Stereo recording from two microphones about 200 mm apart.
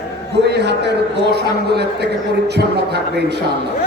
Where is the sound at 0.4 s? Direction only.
55° right (ahead or behind).